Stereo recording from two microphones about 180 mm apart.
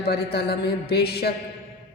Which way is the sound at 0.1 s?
65° left (ahead or behind).